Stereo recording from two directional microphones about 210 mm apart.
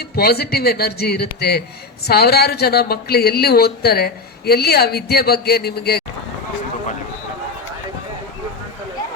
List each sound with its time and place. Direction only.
0.2 s speech: 45° left (ahead or behind)